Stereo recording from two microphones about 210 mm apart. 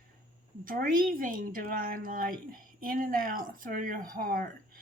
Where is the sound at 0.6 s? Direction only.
40° right (ahead or behind).